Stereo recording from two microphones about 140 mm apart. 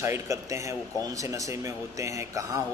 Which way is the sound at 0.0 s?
20° right (ahead or behind).